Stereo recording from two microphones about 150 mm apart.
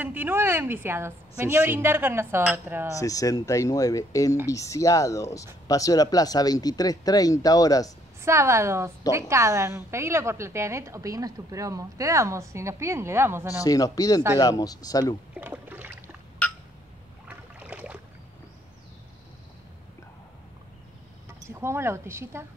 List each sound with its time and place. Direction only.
0.0 s a woman's voice: 10° right (ahead or behind)
3.0 s speech: 25° left (ahead or behind)
8.2 s a woman's voice: 20° right (ahead or behind)
13.6 s speech: 25° left (ahead or behind)
15.3 s rowboat: 10° right (ahead or behind)
17.3 s boat: 10° right (ahead or behind)
21.3 s speech: 15° right (ahead or behind)